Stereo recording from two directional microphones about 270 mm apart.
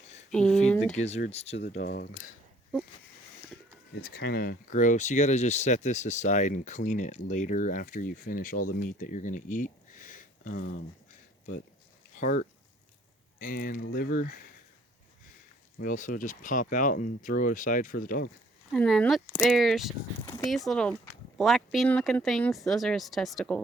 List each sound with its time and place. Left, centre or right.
0.3 s a sound: centre
0.9 s speech: left
1.7 s speech: left
4.0 s speech: left
12.1 s speech: left
15.8 s speech: left
18.7 s speech: centre